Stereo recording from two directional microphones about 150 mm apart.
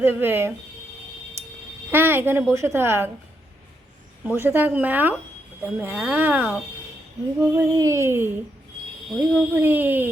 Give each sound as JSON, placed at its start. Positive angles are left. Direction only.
{"t": 0.0, "sound": "a woman's voice", "side_deg": -15}
{"t": 1.9, "sound": "a woman's voice", "side_deg": -15}
{"t": 4.4, "sound": "a woman's voice", "side_deg": -15}
{"t": 7.3, "sound": "a sound", "side_deg": -20}
{"t": 9.1, "sound": "a woman's voice", "side_deg": -15}